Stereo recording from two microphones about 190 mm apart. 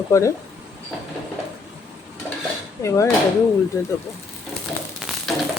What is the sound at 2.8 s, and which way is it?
Speech, 15° left (ahead or behind).